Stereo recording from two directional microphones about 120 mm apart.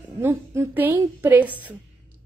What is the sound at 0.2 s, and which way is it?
A woman's voice, 20° right (ahead or behind).